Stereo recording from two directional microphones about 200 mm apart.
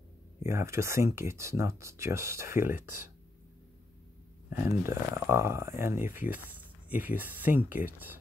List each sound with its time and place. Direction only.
0.4 s speech: 15° right (ahead or behind)
4.5 s speech: 10° right (ahead or behind)